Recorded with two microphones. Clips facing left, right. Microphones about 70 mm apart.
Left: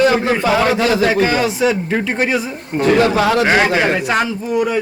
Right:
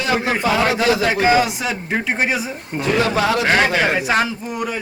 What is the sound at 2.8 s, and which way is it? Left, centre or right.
Speech, left.